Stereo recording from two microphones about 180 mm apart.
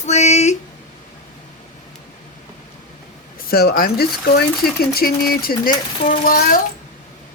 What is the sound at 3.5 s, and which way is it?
A child's voice, 55° left (ahead or behind).